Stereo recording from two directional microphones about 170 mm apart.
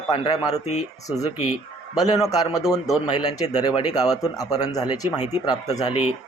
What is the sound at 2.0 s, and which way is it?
Speech, 20° left (ahead or behind).